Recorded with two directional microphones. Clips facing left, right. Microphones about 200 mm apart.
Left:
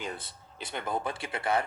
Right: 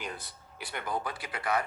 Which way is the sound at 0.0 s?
25° left (ahead or behind).